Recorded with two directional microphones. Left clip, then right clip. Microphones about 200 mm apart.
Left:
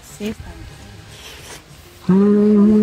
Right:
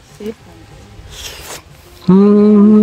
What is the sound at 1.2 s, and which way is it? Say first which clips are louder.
Rub: right 8 dB; 35° right (ahead or behind).